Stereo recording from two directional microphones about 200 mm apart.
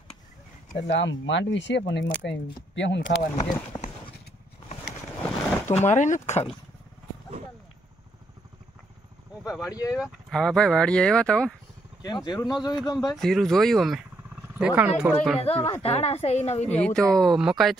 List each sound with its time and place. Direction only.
0.7 s speech: 60° left (ahead or behind)
3.3 s speech: 15° left (ahead or behind)
5.2 s boat: 10° left (ahead or behind)
5.9 s a woman's voice: 40° left (ahead or behind)
9.5 s speech: 15° left (ahead or behind)
9.9 s speech: centre (ahead or behind)
12.0 s speech: 20° left (ahead or behind)
13.1 s speech: centre (ahead or behind)
15.4 s a woman's voice: 30° left (ahead or behind)
16.6 s speech: 5° left (ahead or behind)